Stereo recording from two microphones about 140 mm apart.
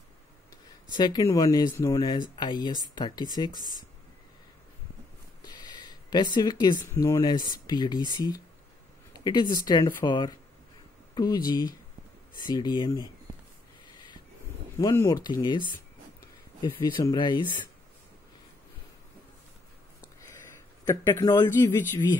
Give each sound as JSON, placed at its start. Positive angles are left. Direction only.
{"t": 0.9, "sound": "a man's voice", "side_deg": 30}
{"t": 5.4, "sound": "a sound", "side_deg": 30}
{"t": 6.9, "sound": "a man's voice", "side_deg": 20}
{"t": 14.8, "sound": "a man's voice", "side_deg": 25}
{"t": 16.7, "sound": "speech", "side_deg": 25}
{"t": 20.8, "sound": "a man's voice", "side_deg": 25}